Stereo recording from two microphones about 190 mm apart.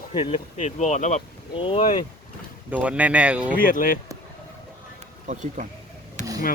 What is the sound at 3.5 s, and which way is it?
Speech, 45° left (ahead or behind).